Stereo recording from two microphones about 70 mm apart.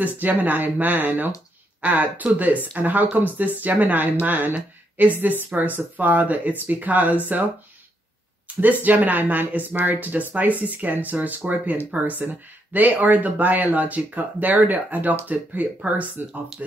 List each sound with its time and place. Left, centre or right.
0.0 s speech: right
8.5 s a sound: right
8.8 s speech: right